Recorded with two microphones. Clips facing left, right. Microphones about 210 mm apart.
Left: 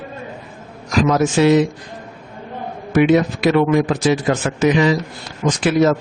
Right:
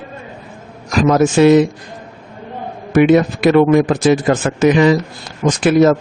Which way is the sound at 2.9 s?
50° right (ahead or behind).